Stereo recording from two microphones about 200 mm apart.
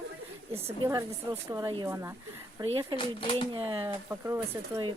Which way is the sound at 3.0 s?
25° left (ahead or behind).